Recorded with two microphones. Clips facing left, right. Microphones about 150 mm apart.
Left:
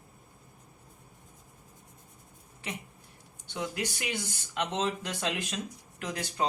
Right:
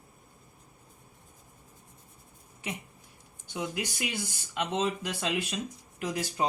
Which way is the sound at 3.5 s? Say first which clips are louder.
Even; 10° right (ahead or behind).